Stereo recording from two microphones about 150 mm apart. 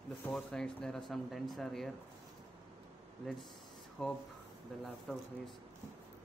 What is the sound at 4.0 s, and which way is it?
Speech, centre (ahead or behind).